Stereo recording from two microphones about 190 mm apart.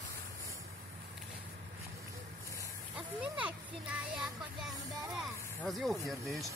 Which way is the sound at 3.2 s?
5° right (ahead or behind).